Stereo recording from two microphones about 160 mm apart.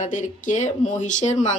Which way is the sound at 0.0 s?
50° left (ahead or behind).